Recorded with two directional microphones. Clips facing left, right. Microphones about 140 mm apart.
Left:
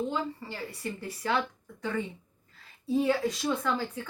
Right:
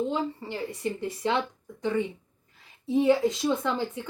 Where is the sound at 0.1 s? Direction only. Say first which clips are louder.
Right 4 dB; 20° right (ahead or behind).